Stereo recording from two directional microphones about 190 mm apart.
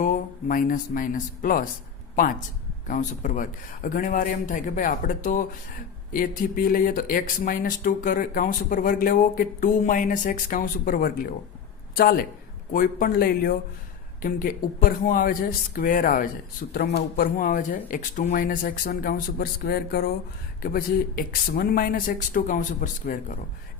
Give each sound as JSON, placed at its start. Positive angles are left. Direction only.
{"t": 0.0, "sound": "speech", "side_deg": 45}
{"t": 2.8, "sound": "speech", "side_deg": 45}